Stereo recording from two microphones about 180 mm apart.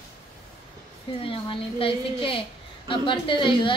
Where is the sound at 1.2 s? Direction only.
30° left (ahead or behind).